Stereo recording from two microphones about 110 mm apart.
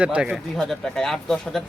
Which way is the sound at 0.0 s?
10° right (ahead or behind).